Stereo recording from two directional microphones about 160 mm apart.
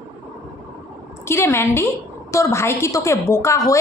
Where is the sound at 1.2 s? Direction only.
15° left (ahead or behind).